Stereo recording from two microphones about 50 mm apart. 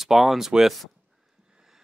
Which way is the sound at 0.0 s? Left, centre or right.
Centre.